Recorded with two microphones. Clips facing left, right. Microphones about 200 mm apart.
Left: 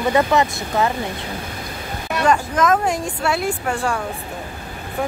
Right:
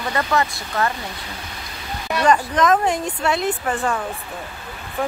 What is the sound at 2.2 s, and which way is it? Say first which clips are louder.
Speech: even; 5° left (ahead or behind).